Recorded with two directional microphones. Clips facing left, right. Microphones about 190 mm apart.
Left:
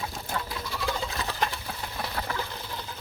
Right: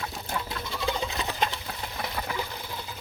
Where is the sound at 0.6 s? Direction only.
20° right (ahead or behind).